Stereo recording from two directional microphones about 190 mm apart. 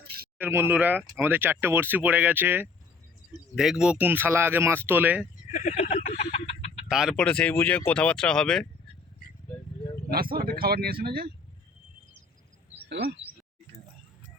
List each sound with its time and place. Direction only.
0.3 s speech: 10° right (ahead or behind)
5.5 s speech: 40° left (ahead or behind)
6.8 s speech: 5° right (ahead or behind)
10.1 s speech: 50° right (ahead or behind)